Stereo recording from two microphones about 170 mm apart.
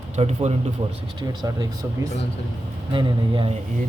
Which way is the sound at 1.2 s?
25° right (ahead or behind).